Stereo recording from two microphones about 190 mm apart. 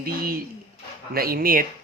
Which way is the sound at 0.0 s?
50° right (ahead or behind).